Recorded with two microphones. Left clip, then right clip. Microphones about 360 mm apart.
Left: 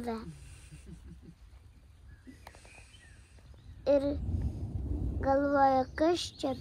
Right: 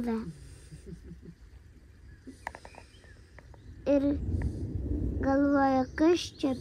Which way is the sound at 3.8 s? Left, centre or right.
Right.